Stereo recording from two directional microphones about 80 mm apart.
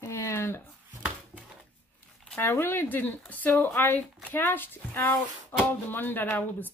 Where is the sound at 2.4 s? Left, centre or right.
Left.